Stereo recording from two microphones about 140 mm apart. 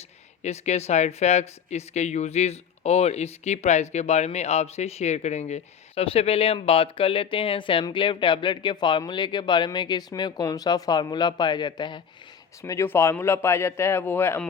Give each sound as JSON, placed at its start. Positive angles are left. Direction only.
{"t": 0.4, "sound": "speech", "side_deg": 55}
{"t": 12.6, "sound": "speech", "side_deg": 20}